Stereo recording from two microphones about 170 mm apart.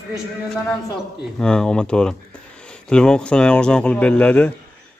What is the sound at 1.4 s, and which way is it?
Speech, 5° left (ahead or behind).